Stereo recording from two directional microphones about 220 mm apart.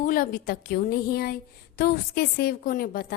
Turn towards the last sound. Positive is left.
turn(degrees=40)  # may be behind; listen again after turning